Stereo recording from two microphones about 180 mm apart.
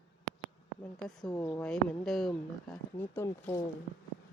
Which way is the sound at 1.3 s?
15° left (ahead or behind).